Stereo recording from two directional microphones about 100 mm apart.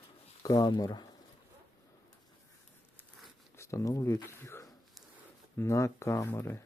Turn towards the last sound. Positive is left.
turn(degrees=25)  # may be behind; listen again after turning